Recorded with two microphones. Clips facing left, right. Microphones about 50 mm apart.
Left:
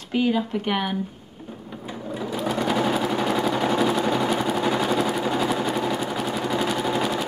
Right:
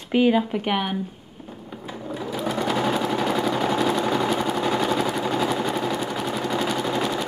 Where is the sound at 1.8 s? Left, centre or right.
Centre.